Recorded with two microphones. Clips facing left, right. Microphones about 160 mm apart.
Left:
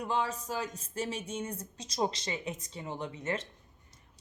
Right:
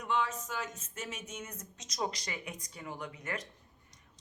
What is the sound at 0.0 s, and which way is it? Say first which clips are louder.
A woman's voice: left 1 dB; 35° left (ahead or behind).